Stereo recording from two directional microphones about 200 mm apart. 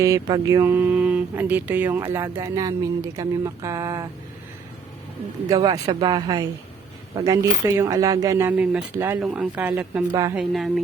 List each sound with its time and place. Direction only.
0.0 s speech: 20° right (ahead or behind)
5.5 s speech: 20° right (ahead or behind)
10.3 s speech: centre (ahead or behind)